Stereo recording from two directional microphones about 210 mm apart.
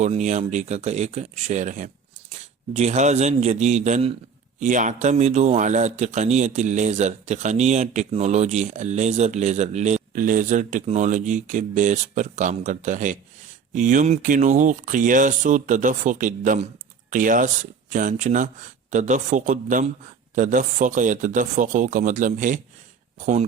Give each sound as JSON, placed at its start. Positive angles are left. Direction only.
{"t": 0.0, "sound": "speech", "side_deg": -35}